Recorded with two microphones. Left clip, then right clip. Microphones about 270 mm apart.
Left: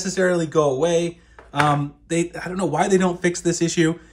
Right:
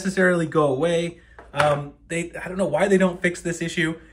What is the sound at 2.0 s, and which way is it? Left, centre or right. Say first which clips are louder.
Speech: left 4 dB; left.